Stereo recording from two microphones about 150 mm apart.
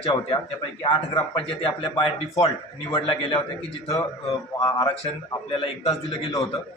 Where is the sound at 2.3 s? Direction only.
20° left (ahead or behind).